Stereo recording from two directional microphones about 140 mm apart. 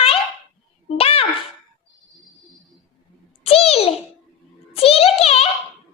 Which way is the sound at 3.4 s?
45° left (ahead or behind).